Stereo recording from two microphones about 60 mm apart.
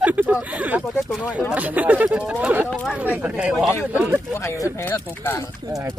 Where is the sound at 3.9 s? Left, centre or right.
Right.